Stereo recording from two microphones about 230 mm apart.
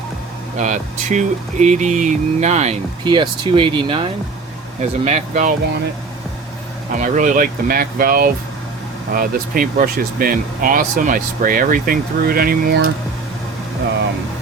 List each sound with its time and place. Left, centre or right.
0.6 s speech: right
6.9 s speech: right